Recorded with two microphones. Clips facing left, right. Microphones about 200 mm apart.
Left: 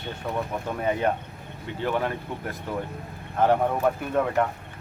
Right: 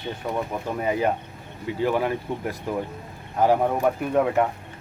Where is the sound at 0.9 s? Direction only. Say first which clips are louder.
Right 1 dB; 5° right (ahead or behind).